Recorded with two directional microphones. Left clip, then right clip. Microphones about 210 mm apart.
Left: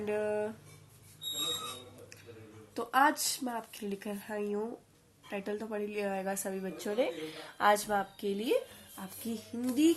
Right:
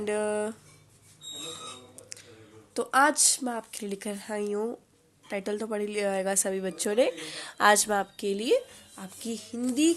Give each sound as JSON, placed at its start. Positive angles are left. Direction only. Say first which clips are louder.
{"t": 0.0, "sound": "a woman's voice", "louder": "right 4 dB", "side_deg": -50}
{"t": 2.7, "sound": "a woman's voice", "louder": "right 5 dB", "side_deg": -50}
{"t": 9.2, "sound": "a sound", "louder": "right 5 dB", "side_deg": -40}